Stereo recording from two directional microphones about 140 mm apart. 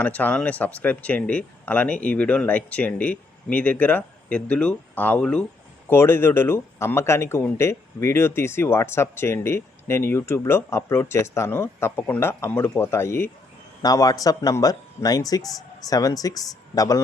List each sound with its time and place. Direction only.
0.0 s speech: 10° left (ahead or behind)
5.9 s speech: 15° left (ahead or behind)